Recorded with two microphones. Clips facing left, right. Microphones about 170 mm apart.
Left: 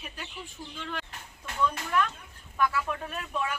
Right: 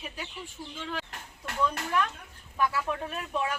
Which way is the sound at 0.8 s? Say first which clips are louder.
Right 1 dB; 5° right (ahead or behind).